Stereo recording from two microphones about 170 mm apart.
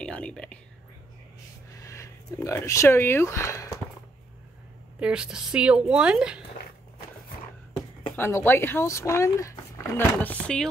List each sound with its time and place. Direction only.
0.0 s whispering: 5° left (ahead or behind)
1.7 s speech: 20° left (ahead or behind)
5.0 s a woman's voice: 5° right (ahead or behind)
7.7 s speech: 15° left (ahead or behind)